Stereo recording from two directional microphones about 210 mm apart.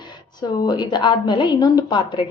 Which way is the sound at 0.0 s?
20° left (ahead or behind).